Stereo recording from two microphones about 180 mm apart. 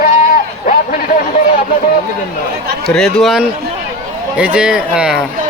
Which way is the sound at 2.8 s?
5° left (ahead or behind).